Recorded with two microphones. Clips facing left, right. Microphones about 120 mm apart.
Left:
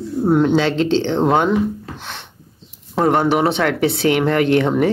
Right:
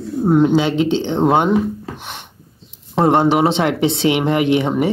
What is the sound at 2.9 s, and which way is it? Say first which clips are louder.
Speech: right 2 dB; 25° right (ahead or behind).